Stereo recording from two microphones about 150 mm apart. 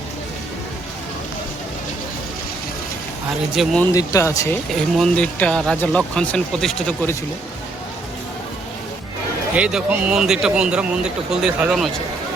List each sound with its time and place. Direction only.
3.5 s a man's voice: centre (ahead or behind)
3.9 s speech: 20° left (ahead or behind)
4.7 s a man's voice: 5° left (ahead or behind)
9.6 s a man's voice: 5° right (ahead or behind)